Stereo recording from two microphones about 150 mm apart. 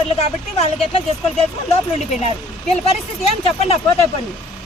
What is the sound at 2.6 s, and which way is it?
Speech, 45° left (ahead or behind).